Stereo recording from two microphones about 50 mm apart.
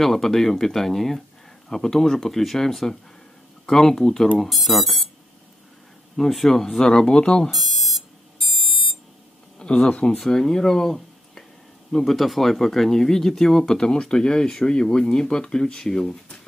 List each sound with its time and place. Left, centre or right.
0.0 s speech: centre
6.1 s speech: centre
7.5 s alarm clock: centre
9.6 s speech: centre
10.1 s speech: centre